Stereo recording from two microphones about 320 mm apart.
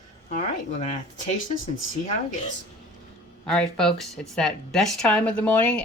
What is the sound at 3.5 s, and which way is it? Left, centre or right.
Speech, centre.